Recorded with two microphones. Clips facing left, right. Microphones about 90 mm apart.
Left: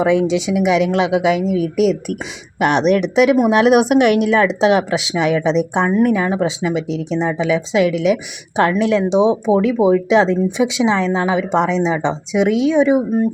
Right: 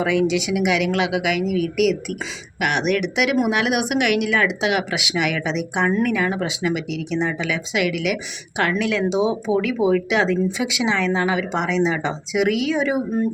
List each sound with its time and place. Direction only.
0.0 s speech: 25° left (ahead or behind)
9.5 s speech: 50° left (ahead or behind)
9.9 s speech: 25° left (ahead or behind)